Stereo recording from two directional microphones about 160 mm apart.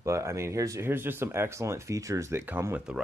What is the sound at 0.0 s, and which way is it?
Speech, 20° right (ahead or behind).